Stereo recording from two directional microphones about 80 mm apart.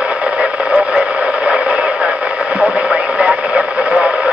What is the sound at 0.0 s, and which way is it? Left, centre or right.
Radio, centre.